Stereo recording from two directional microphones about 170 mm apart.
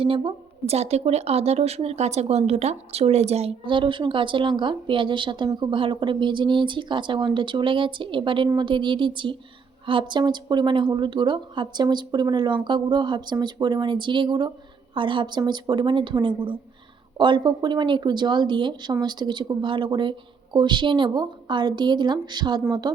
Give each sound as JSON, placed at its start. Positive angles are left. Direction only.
{"t": 0.0, "sound": "a woman's voice", "side_deg": -35}